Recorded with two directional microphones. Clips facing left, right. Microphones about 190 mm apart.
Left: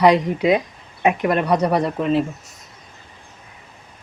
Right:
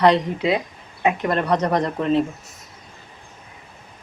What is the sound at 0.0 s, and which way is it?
Speech, 15° left (ahead or behind).